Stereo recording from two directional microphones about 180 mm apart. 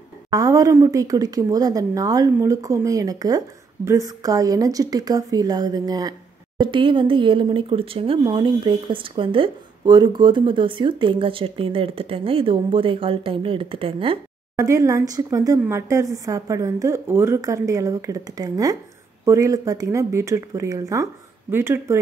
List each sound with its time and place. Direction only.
0.3 s speech: 20° right (ahead or behind)
14.6 s a woman's voice: 15° right (ahead or behind)